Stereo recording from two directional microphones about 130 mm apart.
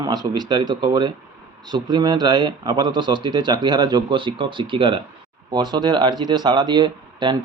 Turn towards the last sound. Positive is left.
turn(degrees=-35)  # may be behind; listen again after turning